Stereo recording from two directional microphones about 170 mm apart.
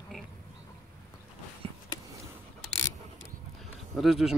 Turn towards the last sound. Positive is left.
turn(degrees=0)  # may be behind; listen again after turning